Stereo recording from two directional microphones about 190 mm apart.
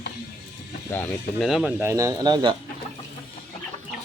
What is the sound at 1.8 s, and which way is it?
Speech, 15° right (ahead or behind).